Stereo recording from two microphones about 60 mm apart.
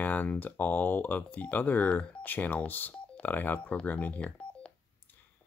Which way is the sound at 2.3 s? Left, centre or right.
Left.